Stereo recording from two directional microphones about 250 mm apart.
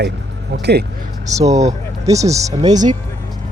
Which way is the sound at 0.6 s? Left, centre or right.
Right.